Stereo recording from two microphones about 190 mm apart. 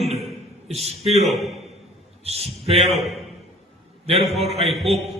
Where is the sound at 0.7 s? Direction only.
35° right (ahead or behind).